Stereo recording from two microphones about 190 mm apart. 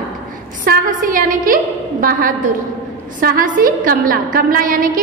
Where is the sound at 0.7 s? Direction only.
45° right (ahead or behind).